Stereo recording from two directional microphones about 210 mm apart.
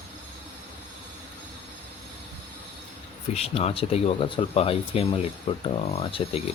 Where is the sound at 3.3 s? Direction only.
30° left (ahead or behind).